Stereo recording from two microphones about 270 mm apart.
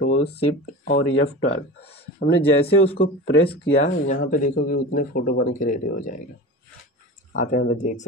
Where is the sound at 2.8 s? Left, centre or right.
Left.